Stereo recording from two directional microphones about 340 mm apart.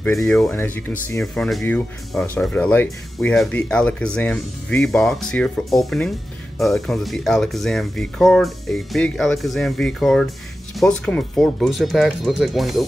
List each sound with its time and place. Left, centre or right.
0.0 s speech: centre